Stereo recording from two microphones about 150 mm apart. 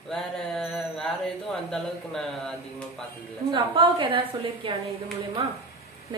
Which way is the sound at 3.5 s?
35° right (ahead or behind).